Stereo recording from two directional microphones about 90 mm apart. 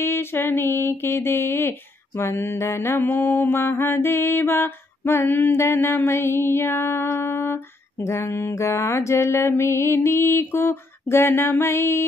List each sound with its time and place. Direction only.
0.0 s mantra: 25° left (ahead or behind)